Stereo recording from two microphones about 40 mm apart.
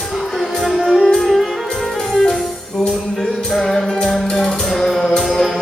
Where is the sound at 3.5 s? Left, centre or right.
Centre.